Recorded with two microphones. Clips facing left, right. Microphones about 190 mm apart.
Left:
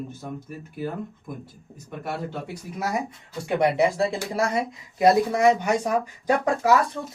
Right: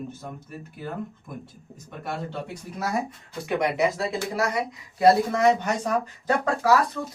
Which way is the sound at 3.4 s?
30° left (ahead or behind).